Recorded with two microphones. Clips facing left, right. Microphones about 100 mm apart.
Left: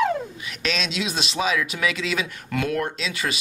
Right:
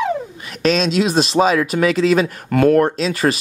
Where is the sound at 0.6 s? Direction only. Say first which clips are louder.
Right 11 dB; 40° right (ahead or behind).